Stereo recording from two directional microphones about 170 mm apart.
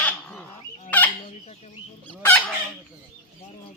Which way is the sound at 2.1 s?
10° left (ahead or behind).